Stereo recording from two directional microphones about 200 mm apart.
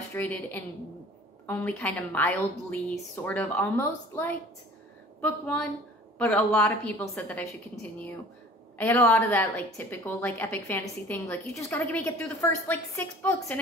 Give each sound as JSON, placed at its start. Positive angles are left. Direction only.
{"t": 0.1, "sound": "a woman's voice", "side_deg": 10}